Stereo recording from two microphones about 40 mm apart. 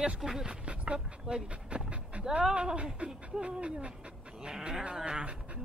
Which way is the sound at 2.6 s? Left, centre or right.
Centre.